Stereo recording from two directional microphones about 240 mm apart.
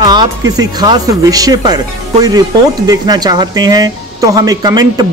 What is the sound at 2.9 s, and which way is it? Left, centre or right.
Speech, centre.